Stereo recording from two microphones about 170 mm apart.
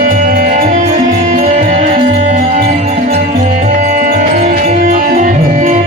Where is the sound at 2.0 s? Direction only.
35° right (ahead or behind).